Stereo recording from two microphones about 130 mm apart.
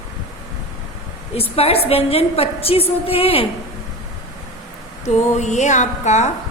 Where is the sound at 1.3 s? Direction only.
50° left (ahead or behind).